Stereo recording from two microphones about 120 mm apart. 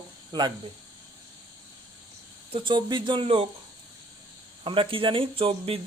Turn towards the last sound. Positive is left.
turn(degrees=-50)  # may be behind; listen again after turning